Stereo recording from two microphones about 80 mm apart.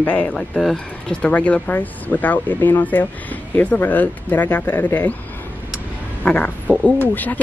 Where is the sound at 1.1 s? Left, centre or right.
Centre.